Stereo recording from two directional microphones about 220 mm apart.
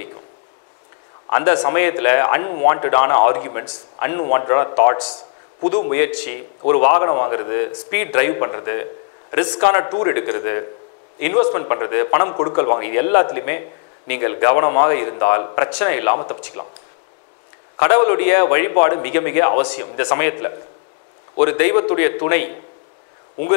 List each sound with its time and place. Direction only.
1.3 s speech: 20° left (ahead or behind)
5.6 s a man's voice: 40° left (ahead or behind)
5.9 s a man's voice: 15° left (ahead or behind)
17.7 s a man's voice: 15° left (ahead or behind)